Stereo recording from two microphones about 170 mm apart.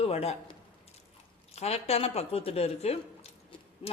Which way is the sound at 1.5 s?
40° left (ahead or behind).